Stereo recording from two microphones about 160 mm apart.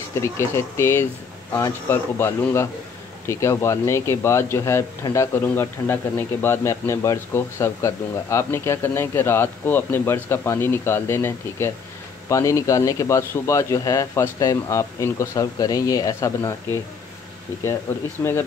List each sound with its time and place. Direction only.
0.2 s a man's voice: 15° left (ahead or behind)
18.2 s speech: 15° left (ahead or behind)